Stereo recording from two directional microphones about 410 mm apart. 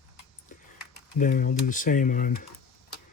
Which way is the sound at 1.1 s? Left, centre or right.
Centre.